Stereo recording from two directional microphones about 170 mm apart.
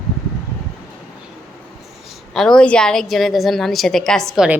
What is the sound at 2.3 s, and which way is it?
A woman's voice, centre (ahead or behind).